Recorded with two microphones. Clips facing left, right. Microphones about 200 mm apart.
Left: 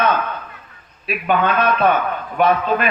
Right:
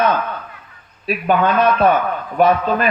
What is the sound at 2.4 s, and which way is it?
Speech, 40° right (ahead or behind).